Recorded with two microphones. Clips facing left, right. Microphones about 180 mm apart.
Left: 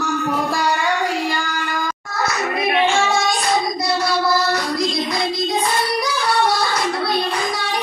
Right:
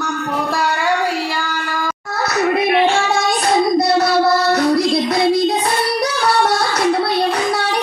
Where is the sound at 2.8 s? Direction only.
60° right (ahead or behind).